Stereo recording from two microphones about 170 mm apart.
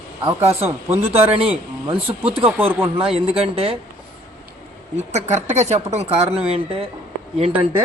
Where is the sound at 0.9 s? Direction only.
35° right (ahead or behind).